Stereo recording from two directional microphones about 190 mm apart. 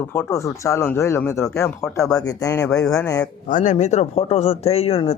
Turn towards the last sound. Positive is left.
turn(degrees=30)  # may be behind; listen again after turning